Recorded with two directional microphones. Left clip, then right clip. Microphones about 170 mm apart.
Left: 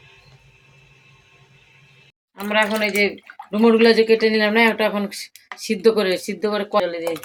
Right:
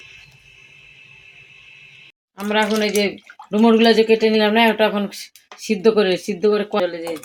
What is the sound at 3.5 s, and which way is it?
Speech, 40° right (ahead or behind).